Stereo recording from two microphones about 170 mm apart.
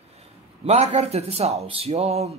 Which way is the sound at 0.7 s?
40° right (ahead or behind).